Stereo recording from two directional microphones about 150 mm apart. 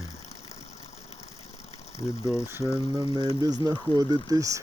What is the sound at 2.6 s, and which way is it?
Speech, 20° left (ahead or behind).